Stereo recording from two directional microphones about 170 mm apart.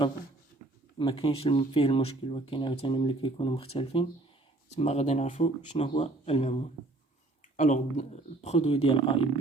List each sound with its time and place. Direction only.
0.9 s speech: 30° left (ahead or behind)